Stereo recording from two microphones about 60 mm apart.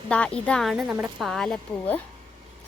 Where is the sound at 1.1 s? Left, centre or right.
Centre.